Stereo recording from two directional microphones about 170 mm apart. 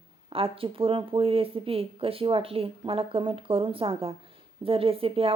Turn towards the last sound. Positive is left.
turn(degrees=-35)  # may be behind; listen again after turning